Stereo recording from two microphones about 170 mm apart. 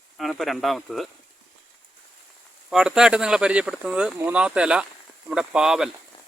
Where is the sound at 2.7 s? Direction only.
5° right (ahead or behind).